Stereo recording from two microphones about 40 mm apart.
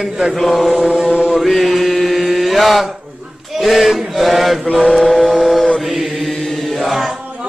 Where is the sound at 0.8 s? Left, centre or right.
Right.